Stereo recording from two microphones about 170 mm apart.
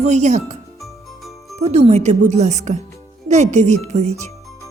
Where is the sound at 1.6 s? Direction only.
40° right (ahead or behind).